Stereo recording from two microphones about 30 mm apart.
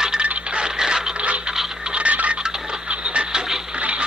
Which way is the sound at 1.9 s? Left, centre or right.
Right.